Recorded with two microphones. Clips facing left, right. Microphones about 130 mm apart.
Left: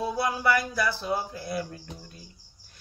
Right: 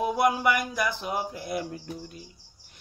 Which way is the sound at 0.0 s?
15° right (ahead or behind).